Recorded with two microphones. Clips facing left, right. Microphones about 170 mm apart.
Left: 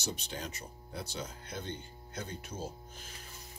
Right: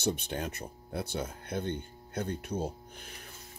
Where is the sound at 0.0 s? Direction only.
55° right (ahead or behind).